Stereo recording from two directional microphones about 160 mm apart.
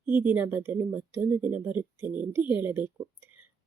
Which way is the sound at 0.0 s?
10° right (ahead or behind).